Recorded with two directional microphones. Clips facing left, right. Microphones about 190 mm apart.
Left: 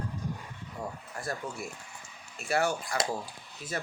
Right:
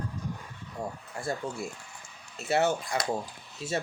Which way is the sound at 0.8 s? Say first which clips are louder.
Right 2 dB; 30° right (ahead or behind).